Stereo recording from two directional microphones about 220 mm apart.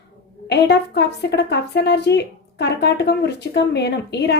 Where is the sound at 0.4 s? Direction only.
50° left (ahead or behind).